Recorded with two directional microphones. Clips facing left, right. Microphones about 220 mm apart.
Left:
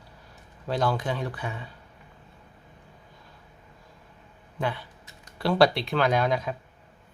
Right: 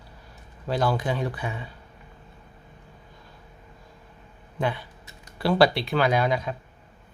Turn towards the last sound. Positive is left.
turn(degrees=0)  # may be behind; listen again after turning